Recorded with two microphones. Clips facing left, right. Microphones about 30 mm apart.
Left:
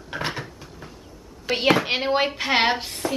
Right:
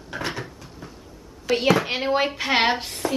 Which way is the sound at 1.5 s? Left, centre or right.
Centre.